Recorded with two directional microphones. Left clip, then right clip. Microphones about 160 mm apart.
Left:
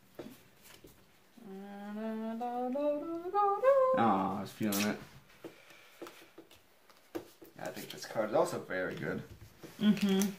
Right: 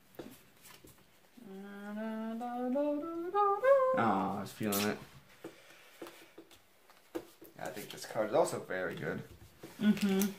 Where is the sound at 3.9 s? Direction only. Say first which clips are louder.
Left 2 dB; 30° right (ahead or behind).